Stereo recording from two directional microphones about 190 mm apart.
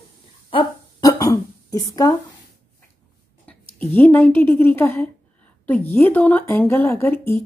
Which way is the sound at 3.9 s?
10° left (ahead or behind).